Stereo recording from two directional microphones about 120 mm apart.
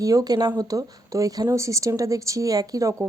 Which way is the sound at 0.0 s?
30° right (ahead or behind).